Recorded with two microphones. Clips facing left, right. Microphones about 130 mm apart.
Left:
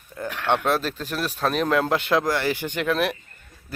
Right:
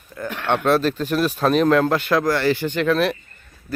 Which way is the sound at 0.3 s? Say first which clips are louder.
Right 3 dB; centre (ahead or behind).